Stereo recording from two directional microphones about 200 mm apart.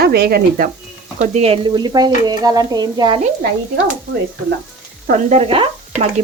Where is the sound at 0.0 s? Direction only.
50° right (ahead or behind).